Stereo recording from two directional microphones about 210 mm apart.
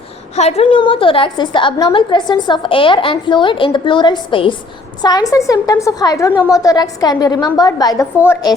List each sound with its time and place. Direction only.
0.3 s a woman's voice: 30° left (ahead or behind)